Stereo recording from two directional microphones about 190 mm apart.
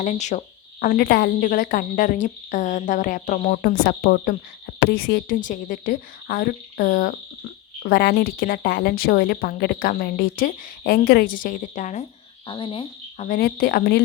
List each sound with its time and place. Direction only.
0.0 s speech: 40° left (ahead or behind)
12.5 s speech: 25° left (ahead or behind)
13.2 s speech: 50° left (ahead or behind)